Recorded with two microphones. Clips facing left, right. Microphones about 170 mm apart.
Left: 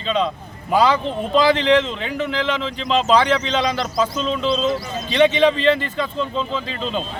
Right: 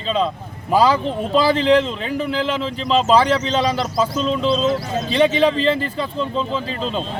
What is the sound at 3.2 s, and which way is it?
Speech, 35° right (ahead or behind).